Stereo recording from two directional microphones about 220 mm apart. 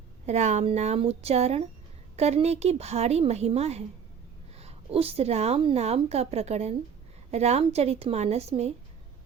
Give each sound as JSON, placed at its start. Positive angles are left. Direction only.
{"t": 0.3, "sound": "a woman's voice", "side_deg": -30}